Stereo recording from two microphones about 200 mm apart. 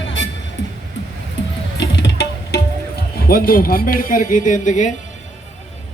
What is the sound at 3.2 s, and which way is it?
Speech, 45° left (ahead or behind).